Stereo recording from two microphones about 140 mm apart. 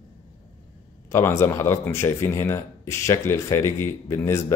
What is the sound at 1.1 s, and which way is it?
Speech, 20° left (ahead or behind).